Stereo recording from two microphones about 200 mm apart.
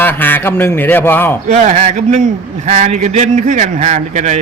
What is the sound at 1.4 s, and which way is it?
Speech, 35° right (ahead or behind).